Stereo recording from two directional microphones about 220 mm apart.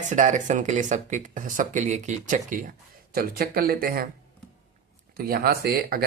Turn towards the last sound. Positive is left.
turn(degrees=-45)  # may be behind; listen again after turning